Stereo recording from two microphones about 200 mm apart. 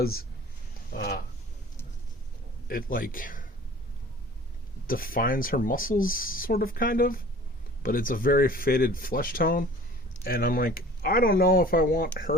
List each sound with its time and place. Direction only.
0.0 s speech: 50° left (ahead or behind)
0.9 s a sound: 55° left (ahead or behind)
2.6 s speech: 45° left (ahead or behind)
4.9 s speech: 45° left (ahead or behind)